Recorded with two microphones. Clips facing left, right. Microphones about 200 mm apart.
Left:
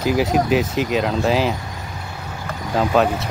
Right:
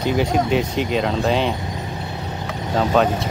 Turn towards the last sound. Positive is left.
turn(degrees=0)  # may be behind; listen again after turning